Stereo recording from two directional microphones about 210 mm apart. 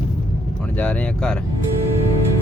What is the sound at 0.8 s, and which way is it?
Speech, 5° left (ahead or behind).